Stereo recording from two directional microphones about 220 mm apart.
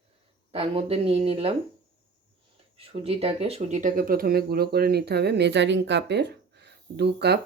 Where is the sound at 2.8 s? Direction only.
25° right (ahead or behind).